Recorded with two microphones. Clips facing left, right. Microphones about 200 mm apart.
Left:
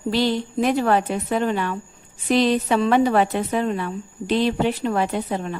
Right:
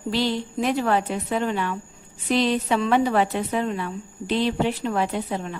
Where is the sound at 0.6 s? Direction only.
50° left (ahead or behind).